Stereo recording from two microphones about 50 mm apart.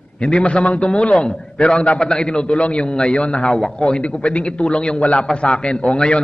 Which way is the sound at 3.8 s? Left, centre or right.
Left.